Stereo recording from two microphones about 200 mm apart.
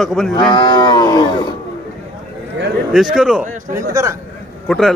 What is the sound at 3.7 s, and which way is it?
Speech, 15° right (ahead or behind).